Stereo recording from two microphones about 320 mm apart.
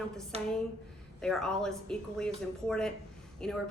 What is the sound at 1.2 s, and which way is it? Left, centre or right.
Speech, centre.